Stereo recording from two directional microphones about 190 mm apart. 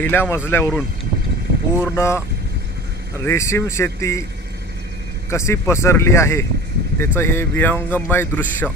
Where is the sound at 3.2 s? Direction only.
15° left (ahead or behind).